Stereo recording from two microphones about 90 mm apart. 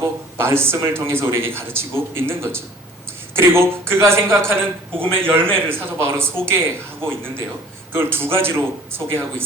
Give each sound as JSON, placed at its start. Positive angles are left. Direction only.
{"t": 0.0, "sound": "speech", "side_deg": -30}